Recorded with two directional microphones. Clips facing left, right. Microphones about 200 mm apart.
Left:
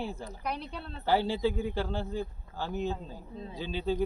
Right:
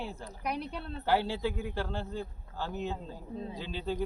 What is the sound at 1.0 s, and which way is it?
Speech, 15° left (ahead or behind).